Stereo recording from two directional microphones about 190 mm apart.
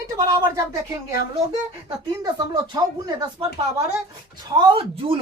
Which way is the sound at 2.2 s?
20° right (ahead or behind).